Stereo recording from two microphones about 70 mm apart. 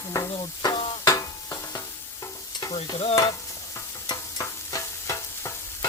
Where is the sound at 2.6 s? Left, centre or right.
Left.